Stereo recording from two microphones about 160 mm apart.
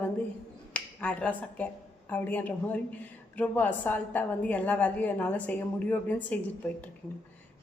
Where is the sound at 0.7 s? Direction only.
5° left (ahead or behind).